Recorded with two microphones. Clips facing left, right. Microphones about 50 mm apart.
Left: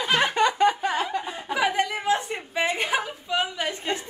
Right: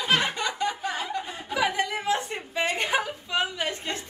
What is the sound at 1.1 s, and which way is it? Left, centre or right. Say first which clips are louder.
Chuckle: left 2 dB; left.